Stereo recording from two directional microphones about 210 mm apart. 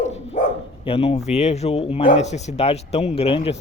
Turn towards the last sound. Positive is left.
turn(degrees=25)  # may be behind; listen again after turning